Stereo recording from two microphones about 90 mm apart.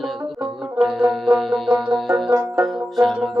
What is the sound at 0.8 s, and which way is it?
Music, centre (ahead or behind).